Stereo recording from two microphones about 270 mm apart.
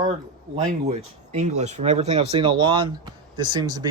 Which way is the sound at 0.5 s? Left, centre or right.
Right.